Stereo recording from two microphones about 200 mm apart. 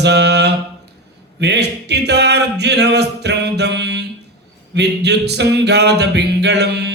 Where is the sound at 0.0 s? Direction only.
55° right (ahead or behind).